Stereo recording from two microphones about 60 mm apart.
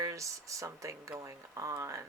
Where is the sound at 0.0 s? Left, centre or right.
Right.